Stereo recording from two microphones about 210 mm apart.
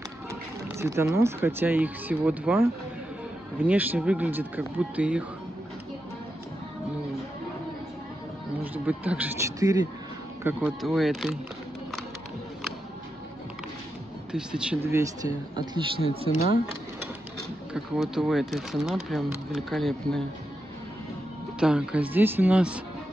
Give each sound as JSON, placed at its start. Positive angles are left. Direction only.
{"t": 0.3, "sound": "speech", "side_deg": -15}
{"t": 8.7, "sound": "speech", "side_deg": -10}
{"t": 10.4, "sound": "speech", "side_deg": -5}
{"t": 14.3, "sound": "speech", "side_deg": -5}
{"t": 15.6, "sound": "a man's voice", "side_deg": -25}
{"t": 17.7, "sound": "speech", "side_deg": 0}
{"t": 21.5, "sound": "speech", "side_deg": -5}